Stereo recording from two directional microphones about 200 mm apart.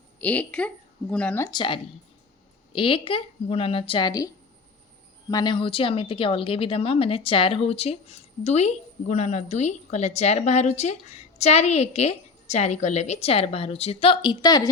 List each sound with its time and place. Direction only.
0.2 s a woman's voice: 5° left (ahead or behind)
1.5 s a woman's voice: 25° left (ahead or behind)
5.3 s speech: 20° left (ahead or behind)